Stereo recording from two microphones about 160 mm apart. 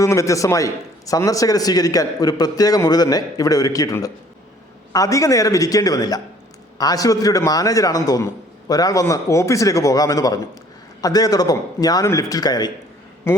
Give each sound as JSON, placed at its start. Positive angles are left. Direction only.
{"t": 0.0, "sound": "a man's voice", "side_deg": 20}